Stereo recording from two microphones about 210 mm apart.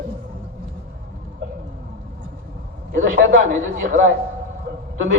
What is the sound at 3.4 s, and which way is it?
Speech, 35° right (ahead or behind).